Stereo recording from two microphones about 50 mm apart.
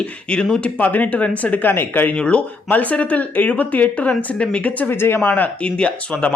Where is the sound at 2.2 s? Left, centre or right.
Left.